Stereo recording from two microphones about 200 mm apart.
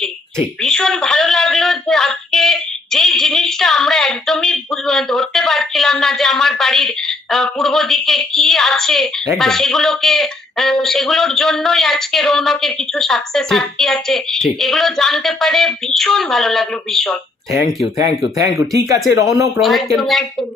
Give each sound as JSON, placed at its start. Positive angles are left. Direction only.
{"t": 0.6, "sound": "a sound", "side_deg": 5}
{"t": 9.4, "sound": "speech", "side_deg": 0}
{"t": 17.9, "sound": "speech", "side_deg": -15}
{"t": 19.5, "sound": "speech", "side_deg": 0}